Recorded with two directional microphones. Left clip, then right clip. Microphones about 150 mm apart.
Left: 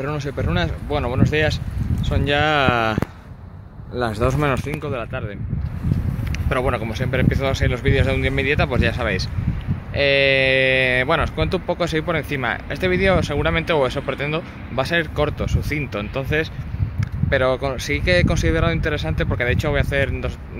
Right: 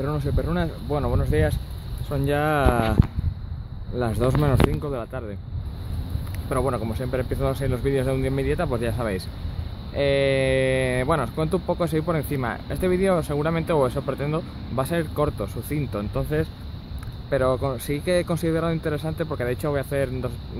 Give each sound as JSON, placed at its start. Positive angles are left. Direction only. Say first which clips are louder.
{"t": 0.0, "sound": "speech", "louder": "left 2 dB", "side_deg": -5}
{"t": 4.0, "sound": "speech", "louder": "left 3 dB", "side_deg": -10}
{"t": 4.8, "sound": "speech", "louder": "left 3 dB", "side_deg": -20}
{"t": 6.5, "sound": "speech", "louder": "left 3 dB", "side_deg": -5}